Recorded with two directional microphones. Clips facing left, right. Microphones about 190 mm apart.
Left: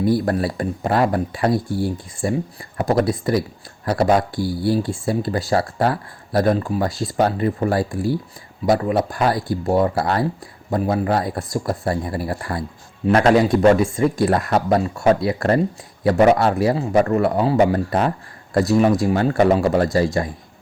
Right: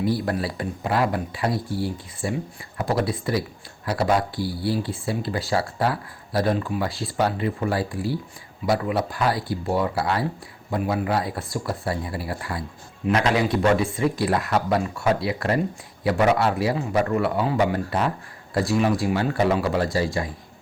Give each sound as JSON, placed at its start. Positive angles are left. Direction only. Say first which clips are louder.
{"t": 0.0, "sound": "speech", "louder": "left 5 dB", "side_deg": 45}